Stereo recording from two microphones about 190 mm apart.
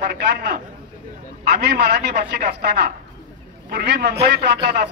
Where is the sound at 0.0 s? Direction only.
60° right (ahead or behind).